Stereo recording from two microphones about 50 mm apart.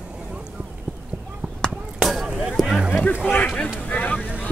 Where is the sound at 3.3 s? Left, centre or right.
Left.